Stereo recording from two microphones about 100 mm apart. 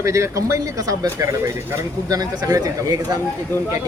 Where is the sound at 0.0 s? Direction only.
30° right (ahead or behind).